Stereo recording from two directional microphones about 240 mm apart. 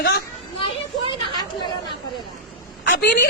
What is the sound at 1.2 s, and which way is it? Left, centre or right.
Chatter, centre.